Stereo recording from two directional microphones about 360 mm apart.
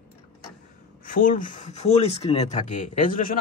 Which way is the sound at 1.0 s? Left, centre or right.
Left.